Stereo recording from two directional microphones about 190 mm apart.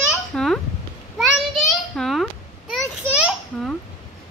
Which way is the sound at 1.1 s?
Centre (ahead or behind).